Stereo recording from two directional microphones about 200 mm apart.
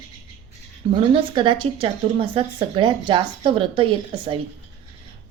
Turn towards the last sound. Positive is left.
turn(degrees=-25)  # may be behind; listen again after turning